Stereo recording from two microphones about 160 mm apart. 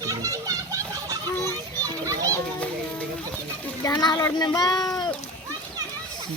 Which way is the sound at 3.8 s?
20° left (ahead or behind).